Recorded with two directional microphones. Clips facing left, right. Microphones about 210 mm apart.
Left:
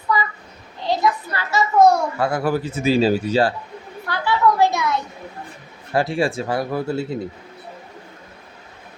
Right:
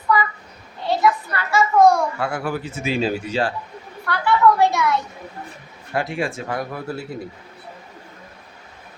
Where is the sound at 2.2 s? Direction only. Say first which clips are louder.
Left 4 dB; 40° left (ahead or behind).